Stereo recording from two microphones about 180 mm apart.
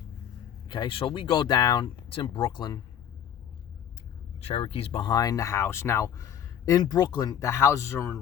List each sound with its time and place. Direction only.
0.7 s speech: 25° left (ahead or behind)
4.4 s speech: 30° left (ahead or behind); by 8.2 s 15° left (ahead or behind)